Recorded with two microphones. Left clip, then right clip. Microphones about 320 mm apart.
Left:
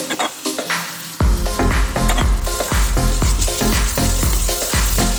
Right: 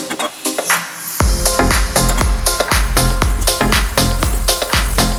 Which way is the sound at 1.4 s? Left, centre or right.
Right.